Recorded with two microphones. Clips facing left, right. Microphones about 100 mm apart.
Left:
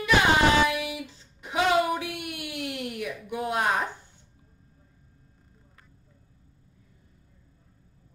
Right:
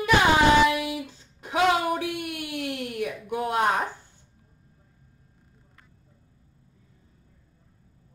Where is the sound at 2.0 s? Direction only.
40° right (ahead or behind).